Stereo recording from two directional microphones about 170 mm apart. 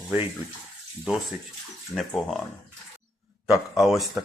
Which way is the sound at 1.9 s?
Centre (ahead or behind).